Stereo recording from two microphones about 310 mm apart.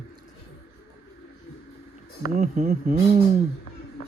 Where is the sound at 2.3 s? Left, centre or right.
Right.